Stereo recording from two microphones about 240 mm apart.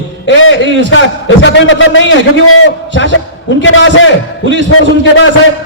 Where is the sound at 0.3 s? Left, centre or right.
Left.